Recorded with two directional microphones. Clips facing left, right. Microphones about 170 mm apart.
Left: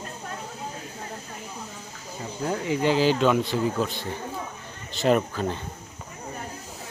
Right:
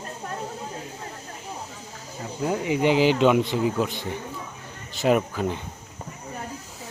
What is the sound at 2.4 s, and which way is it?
Speech, 15° right (ahead or behind).